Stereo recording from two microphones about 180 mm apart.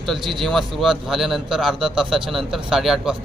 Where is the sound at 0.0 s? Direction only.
Centre (ahead or behind).